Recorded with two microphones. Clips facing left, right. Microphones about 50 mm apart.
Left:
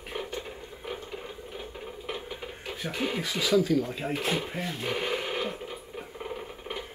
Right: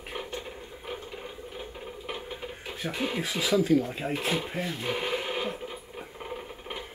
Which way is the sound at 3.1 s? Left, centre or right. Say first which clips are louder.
Left 1 dB; centre.